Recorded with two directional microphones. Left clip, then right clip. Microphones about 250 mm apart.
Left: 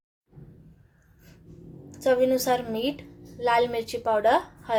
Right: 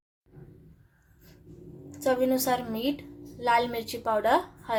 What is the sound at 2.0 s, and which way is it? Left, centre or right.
A woman's voice, centre.